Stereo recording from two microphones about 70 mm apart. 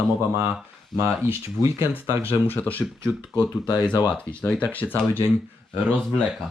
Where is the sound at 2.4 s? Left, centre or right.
Left.